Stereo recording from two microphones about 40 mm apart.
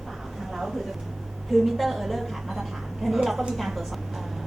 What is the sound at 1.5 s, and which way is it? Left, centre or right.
A woman's voice, centre.